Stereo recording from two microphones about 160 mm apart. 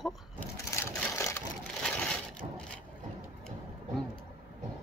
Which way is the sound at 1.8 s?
5° left (ahead or behind).